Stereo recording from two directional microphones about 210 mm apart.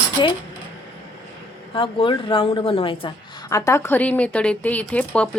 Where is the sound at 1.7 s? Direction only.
25° left (ahead or behind).